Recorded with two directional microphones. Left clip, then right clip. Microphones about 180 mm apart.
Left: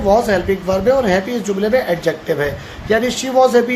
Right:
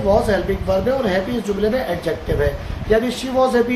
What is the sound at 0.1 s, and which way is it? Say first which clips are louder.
A man's voice: left 3 dB; 45° left (ahead or behind).